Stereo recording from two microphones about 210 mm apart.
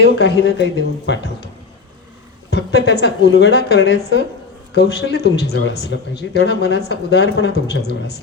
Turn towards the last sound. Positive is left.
turn(degrees=55)  # may be behind; listen again after turning